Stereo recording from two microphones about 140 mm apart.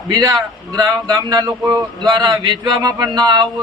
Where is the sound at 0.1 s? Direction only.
30° right (ahead or behind).